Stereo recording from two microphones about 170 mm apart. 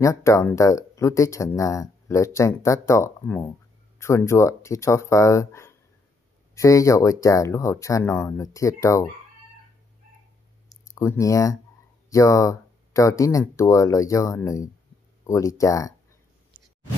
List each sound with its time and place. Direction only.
0.0 s speech: 15° left (ahead or behind)
10.7 s speech: 15° left (ahead or behind)